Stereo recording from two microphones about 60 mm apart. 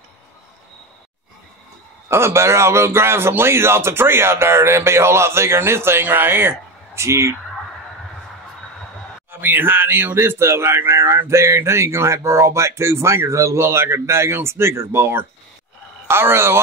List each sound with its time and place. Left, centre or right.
2.0 s speech: right
7.0 s speech: right
9.3 s speech: right